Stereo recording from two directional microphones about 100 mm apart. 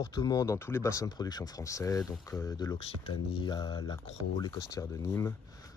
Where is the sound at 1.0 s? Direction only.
40° left (ahead or behind).